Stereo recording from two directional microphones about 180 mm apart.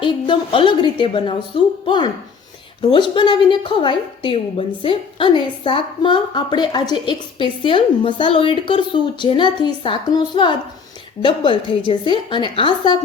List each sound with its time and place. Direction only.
0.0 s a woman's voice: 30° left (ahead or behind)